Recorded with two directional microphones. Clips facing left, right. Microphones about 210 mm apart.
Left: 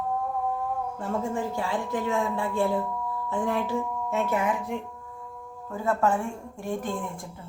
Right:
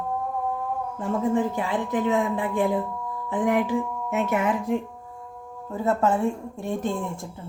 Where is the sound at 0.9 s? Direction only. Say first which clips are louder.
Right 8 dB; 20° right (ahead or behind).